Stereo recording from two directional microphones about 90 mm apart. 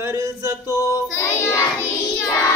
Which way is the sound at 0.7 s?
35° left (ahead or behind).